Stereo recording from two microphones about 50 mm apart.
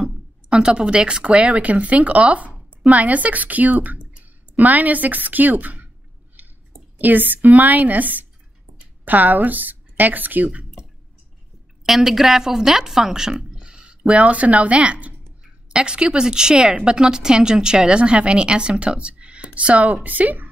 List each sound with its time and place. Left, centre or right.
0.0 s speech: centre; by 5.9 s right
7.0 s a woman's voice: right
11.8 s a woman's voice: centre; by 20.4 s right